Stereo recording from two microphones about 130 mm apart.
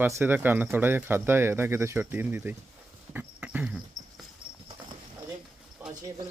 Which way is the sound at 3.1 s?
10° right (ahead or behind).